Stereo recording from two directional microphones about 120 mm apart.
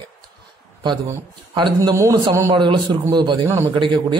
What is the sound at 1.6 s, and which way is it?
Speech, 35° right (ahead or behind).